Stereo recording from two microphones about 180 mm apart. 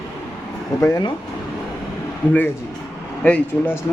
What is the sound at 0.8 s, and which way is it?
Speech, 20° left (ahead or behind).